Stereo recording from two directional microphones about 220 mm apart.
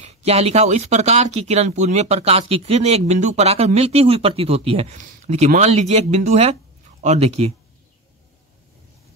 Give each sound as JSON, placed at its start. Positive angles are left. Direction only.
{"t": 0.0, "sound": "speech", "side_deg": -30}